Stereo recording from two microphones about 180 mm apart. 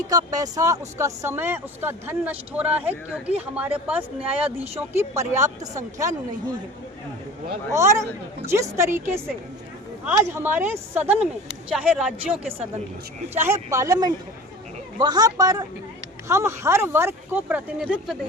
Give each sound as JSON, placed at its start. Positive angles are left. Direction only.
{"t": 0.1, "sound": "speech", "side_deg": -20}
{"t": 4.4, "sound": "speech", "side_deg": -35}
{"t": 4.8, "sound": "speech", "side_deg": -15}
{"t": 7.7, "sound": "speech", "side_deg": -15}
{"t": 13.3, "sound": "a man's voice", "side_deg": -15}